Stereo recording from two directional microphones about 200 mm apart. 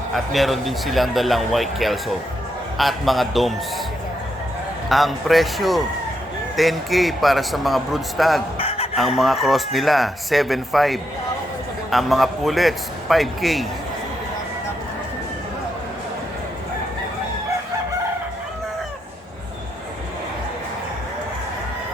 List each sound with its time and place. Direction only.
0.3 s speech: centre (ahead or behind)
4.9 s speech: centre (ahead or behind)
8.5 s a sound: 30° left (ahead or behind)
9.0 s speech: centre (ahead or behind)